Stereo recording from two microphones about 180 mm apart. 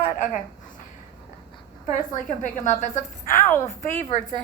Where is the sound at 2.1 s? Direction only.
45° left (ahead or behind).